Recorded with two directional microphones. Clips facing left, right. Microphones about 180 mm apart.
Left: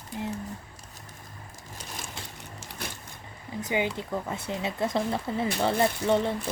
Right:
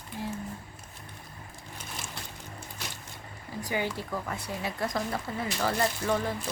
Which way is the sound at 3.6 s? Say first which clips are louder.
Left 3 dB; 20° left (ahead or behind).